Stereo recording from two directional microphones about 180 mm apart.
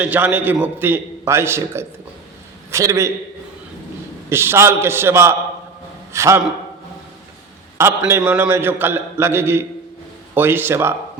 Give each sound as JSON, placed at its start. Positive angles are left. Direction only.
{"t": 0.0, "sound": "a man's voice", "side_deg": -10}
{"t": 4.3, "sound": "a man's voice", "side_deg": -15}
{"t": 7.8, "sound": "a man's voice", "side_deg": -15}